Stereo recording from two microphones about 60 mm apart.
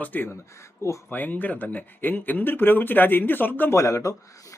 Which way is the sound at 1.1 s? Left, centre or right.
Left.